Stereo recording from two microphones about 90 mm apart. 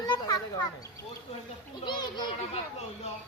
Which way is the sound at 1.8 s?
55° left (ahead or behind).